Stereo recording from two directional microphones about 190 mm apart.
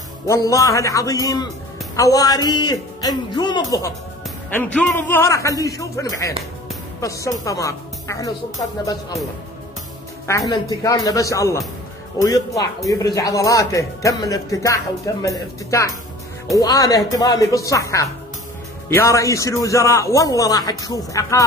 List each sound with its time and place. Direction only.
0.3 s a man's voice: 15° left (ahead or behind)
4.5 s speech: 10° left (ahead or behind)
10.2 s speech: 15° left (ahead or behind)